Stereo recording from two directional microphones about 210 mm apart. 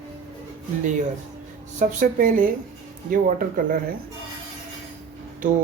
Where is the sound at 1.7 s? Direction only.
40° right (ahead or behind).